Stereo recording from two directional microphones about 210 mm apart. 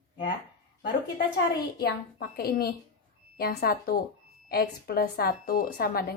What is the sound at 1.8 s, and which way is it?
A woman's voice, 45° left (ahead or behind).